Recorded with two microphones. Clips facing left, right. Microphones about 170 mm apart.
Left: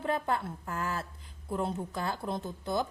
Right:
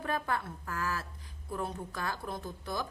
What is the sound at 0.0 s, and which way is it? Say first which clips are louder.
A woman's voice: left 3 dB; 25° left (ahead or behind).